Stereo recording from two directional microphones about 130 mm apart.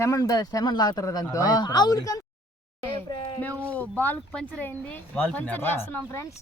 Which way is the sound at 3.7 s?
10° left (ahead or behind).